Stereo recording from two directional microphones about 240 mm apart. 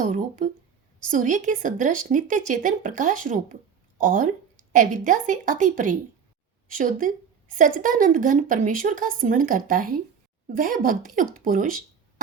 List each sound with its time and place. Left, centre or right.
0.0 s speech: right